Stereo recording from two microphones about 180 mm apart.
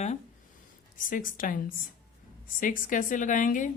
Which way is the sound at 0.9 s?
50° left (ahead or behind).